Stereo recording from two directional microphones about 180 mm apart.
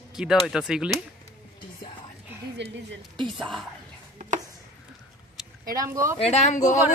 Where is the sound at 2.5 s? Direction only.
80° right.